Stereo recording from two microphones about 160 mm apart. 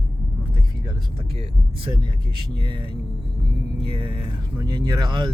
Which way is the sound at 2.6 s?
30° right (ahead or behind).